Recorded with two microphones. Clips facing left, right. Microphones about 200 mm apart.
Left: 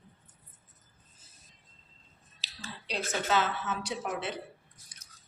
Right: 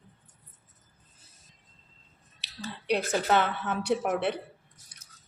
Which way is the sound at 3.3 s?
60° right (ahead or behind).